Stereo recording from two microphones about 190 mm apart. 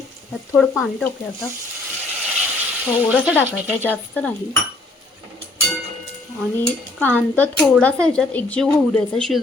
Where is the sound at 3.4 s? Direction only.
10° right (ahead or behind).